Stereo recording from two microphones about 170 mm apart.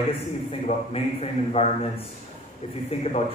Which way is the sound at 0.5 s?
35° left (ahead or behind).